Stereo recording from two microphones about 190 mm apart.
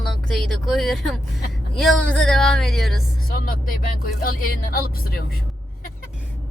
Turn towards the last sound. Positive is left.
turn(degrees=50)  # may be behind; listen again after turning